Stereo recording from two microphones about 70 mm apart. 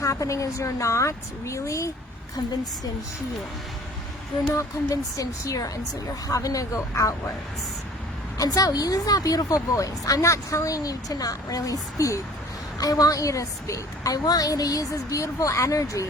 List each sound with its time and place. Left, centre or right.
0.0 s a woman's voice: left
4.9 s speech: left
8.4 s speech: left
12.8 s a woman's voice: left